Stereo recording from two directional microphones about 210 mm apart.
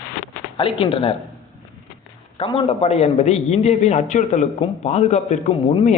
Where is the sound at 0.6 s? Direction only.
25° left (ahead or behind).